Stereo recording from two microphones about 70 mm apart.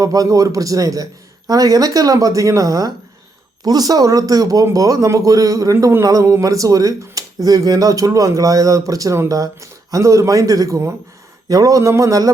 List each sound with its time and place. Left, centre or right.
0.0 s speech: right